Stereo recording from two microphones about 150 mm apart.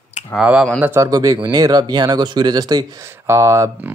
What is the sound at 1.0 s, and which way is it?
Speech, 25° right (ahead or behind).